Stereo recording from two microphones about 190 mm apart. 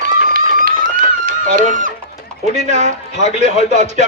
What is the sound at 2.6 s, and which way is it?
A man's voice, 40° right (ahead or behind).